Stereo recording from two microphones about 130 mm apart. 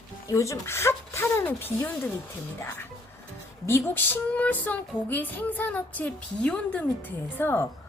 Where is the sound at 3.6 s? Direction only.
20° left (ahead or behind).